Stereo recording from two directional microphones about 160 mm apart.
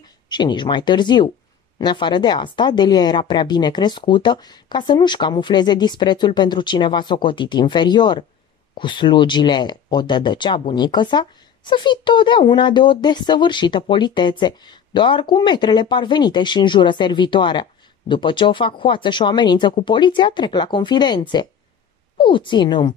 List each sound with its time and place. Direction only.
0.3 s speech: 30° left (ahead or behind)